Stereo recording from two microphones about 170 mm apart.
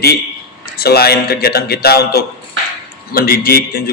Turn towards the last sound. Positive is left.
turn(degrees=60)  # may be behind; listen again after turning